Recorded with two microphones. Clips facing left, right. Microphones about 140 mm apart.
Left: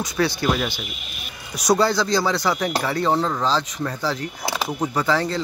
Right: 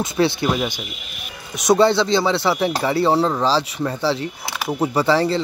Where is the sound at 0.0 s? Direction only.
25° right (ahead or behind).